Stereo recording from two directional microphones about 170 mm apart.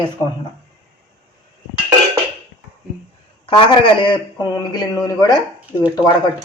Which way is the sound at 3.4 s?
30° left (ahead or behind).